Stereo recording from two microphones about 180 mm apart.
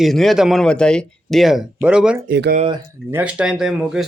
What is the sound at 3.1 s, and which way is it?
Speech, 10° right (ahead or behind).